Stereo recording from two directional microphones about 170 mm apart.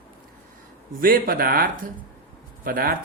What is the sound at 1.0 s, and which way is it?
Speech, 55° right (ahead or behind).